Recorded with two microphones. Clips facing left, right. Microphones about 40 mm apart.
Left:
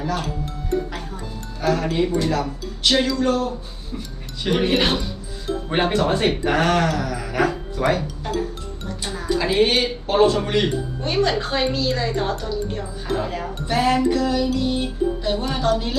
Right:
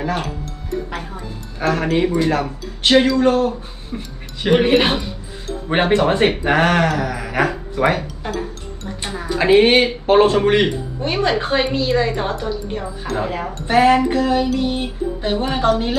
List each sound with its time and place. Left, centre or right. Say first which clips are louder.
1.6 s speech: right 3 dB; right
9.4 s speech: right 7 dB; right
11.0 s speech: right 3 dB; right